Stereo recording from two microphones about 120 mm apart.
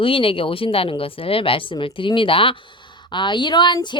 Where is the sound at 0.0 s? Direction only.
50° left (ahead or behind).